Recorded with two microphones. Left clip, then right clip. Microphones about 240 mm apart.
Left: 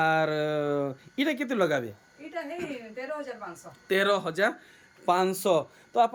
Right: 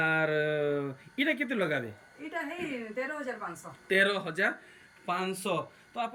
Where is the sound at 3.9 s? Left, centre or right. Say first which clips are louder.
Left 2 dB; centre.